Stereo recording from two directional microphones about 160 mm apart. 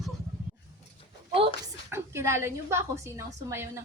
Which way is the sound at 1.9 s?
15° right (ahead or behind).